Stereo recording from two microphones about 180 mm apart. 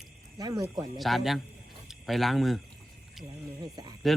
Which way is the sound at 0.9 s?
Centre (ahead or behind).